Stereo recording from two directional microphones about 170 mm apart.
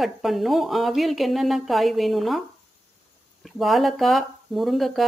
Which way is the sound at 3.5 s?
Centre (ahead or behind).